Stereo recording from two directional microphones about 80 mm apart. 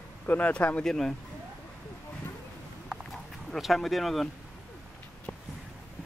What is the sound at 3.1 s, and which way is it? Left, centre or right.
Speech, centre.